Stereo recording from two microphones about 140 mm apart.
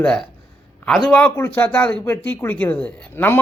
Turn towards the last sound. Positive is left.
turn(degrees=15)  # may be behind; listen again after turning